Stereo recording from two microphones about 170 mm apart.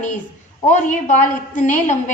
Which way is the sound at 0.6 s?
45° left (ahead or behind).